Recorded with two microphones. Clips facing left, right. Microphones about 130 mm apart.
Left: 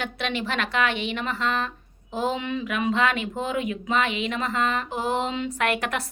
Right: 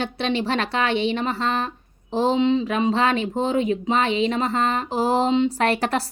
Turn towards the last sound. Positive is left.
turn(degrees=-35)  # may be behind; listen again after turning